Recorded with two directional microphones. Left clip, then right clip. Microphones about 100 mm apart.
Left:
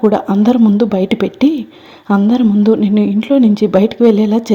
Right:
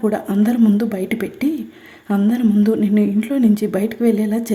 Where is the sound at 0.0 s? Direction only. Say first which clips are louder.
Left 7 dB; 15° left (ahead or behind).